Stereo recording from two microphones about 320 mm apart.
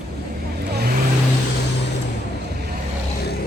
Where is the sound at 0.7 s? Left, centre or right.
Right.